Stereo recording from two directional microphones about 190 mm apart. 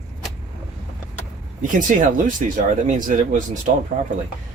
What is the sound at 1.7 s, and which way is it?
Speech, 45° right (ahead or behind).